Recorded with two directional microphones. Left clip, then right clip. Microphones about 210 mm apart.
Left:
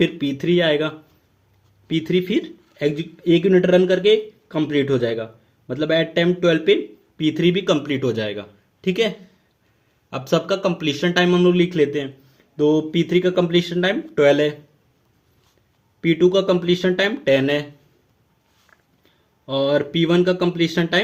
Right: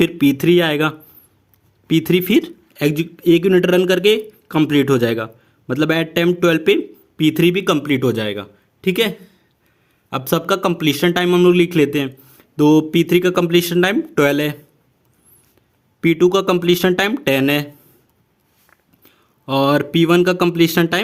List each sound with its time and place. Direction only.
0.0 s a man's voice: 50° right (ahead or behind)
16.0 s speech: 50° right (ahead or behind)
19.0 s speech: 45° right (ahead or behind)